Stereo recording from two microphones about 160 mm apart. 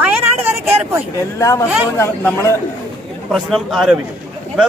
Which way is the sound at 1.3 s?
20° left (ahead or behind).